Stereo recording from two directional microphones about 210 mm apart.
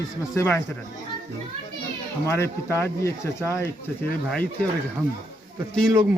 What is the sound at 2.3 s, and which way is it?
Speech, 10° left (ahead or behind).